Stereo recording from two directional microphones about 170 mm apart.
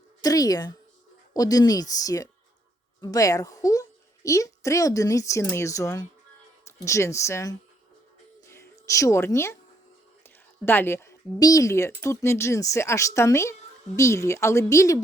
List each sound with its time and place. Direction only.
0.2 s a child's voice: 20° left (ahead or behind)
8.4 s a sound: 15° left (ahead or behind)
10.2 s a woman's voice: 15° left (ahead or behind)